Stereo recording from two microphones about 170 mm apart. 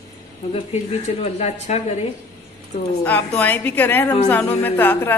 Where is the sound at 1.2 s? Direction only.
40° left (ahead or behind).